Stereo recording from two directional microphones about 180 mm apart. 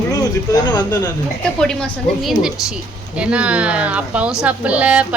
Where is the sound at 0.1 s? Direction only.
20° left (ahead or behind).